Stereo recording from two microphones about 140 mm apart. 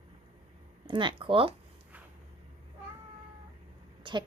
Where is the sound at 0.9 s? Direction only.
35° right (ahead or behind).